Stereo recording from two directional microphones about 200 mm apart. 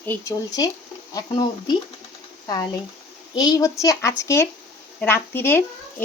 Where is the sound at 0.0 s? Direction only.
15° left (ahead or behind).